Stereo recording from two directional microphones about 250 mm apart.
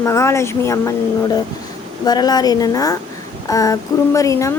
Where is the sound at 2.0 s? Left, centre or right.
Centre.